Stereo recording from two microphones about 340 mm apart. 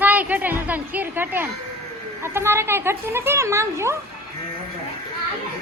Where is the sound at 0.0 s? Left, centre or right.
Centre.